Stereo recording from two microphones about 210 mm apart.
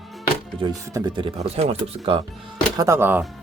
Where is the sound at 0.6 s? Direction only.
15° right (ahead or behind).